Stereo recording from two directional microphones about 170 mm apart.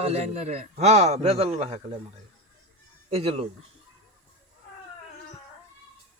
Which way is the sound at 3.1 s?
35° right (ahead or behind).